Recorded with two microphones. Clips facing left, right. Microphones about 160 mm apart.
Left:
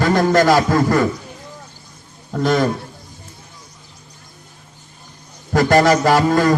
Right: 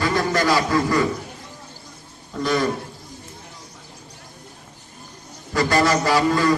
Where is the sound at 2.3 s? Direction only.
50° left (ahead or behind).